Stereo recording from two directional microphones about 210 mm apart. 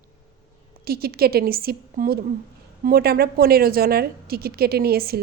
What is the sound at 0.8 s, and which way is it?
A woman's voice, 45° right (ahead or behind).